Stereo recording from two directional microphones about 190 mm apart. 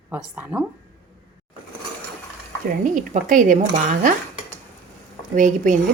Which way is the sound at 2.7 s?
40° right (ahead or behind).